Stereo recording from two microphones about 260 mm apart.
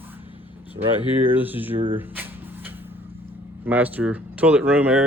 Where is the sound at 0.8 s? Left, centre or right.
Right.